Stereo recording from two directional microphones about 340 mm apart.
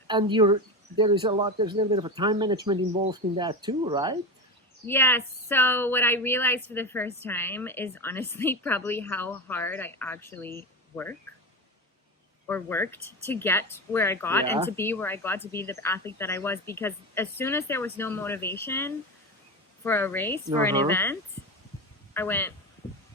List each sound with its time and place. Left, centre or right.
0.1 s speech: centre
4.9 s a woman's voice: centre
12.5 s a woman's voice: centre
13.0 s speech: left
13.2 s a woman's voice: centre